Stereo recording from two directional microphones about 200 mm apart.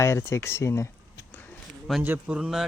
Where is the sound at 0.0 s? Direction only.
15° left (ahead or behind).